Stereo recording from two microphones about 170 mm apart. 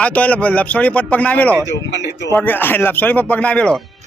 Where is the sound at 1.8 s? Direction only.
90° left.